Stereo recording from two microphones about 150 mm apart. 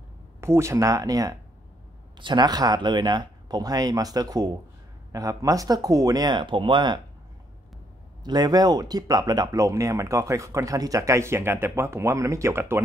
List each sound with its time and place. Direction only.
0.4 s speech: 20° right (ahead or behind)
8.2 s speech: 30° right (ahead or behind)